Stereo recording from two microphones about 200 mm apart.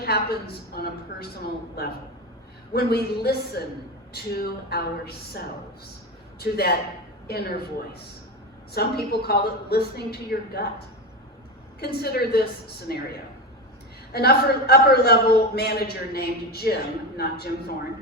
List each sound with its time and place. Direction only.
0.0 s a woman's voice: 50° left (ahead or behind)
2.7 s a man's voice: 50° left (ahead or behind)
6.4 s a man's voice: 50° left (ahead or behind)
12.0 s a man's voice: 50° left (ahead or behind)
14.1 s a man's voice: 50° left (ahead or behind)